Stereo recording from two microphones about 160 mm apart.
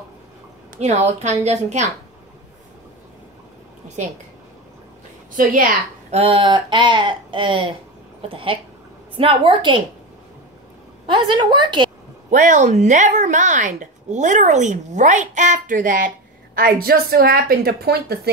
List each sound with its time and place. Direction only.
0.7 s speech: 45° right (ahead or behind)
5.3 s a woman's voice: 60° right (ahead or behind)
6.0 s speech: 40° right (ahead or behind)
11.4 s a woman's voice: 30° right (ahead or behind)
12.3 s speech: 50° right (ahead or behind)
16.5 s a woman's voice: 70° right (ahead or behind)